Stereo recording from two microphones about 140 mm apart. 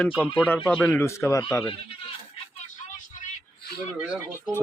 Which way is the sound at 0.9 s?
20° left (ahead or behind).